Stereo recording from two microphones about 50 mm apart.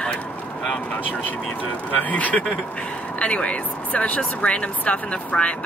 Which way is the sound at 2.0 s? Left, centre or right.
Left.